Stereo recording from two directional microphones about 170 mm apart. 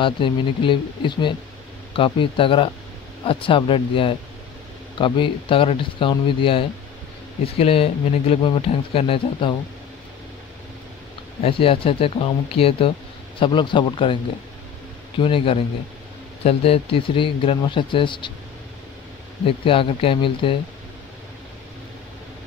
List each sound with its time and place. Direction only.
0.0 s speech: 30° left (ahead or behind)
11.4 s speech: 35° left (ahead or behind)
15.1 s speech: 30° left (ahead or behind)
19.4 s speech: 30° left (ahead or behind)